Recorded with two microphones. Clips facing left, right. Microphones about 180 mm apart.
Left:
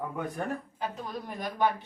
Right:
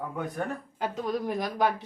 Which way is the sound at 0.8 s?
90° right.